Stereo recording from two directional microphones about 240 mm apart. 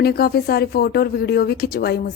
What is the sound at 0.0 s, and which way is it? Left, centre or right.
A woman's voice, left.